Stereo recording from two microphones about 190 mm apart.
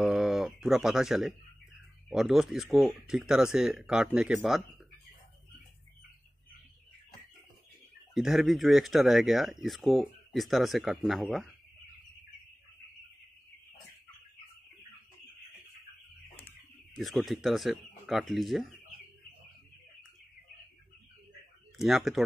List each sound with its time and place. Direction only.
0.0 s a sound: centre (ahead or behind)
3.1 s speech: 5° right (ahead or behind)
8.1 s speech: centre (ahead or behind)
16.4 s speech: centre (ahead or behind)
21.7 s speech: centre (ahead or behind)